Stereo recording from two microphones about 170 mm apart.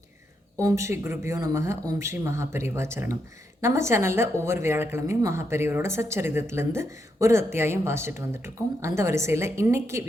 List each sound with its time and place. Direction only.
0.5 s speech: 20° right (ahead or behind)